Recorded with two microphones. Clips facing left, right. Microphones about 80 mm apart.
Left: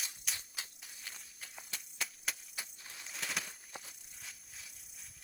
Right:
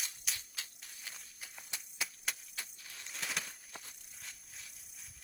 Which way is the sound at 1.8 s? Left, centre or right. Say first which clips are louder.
Right 1 dB; centre.